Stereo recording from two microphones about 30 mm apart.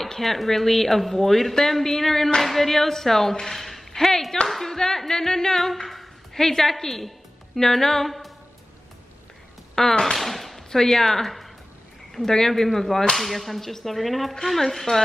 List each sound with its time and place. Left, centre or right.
0.2 s speech: centre
3.9 s clapping: centre
4.5 s speech: centre
5.6 s a sound: centre
6.4 s a woman's voice: centre
9.8 s speech: centre
10.1 s a sound: centre
10.7 s a woman's voice: centre
13.1 s whip: centre
14.5 s speech: centre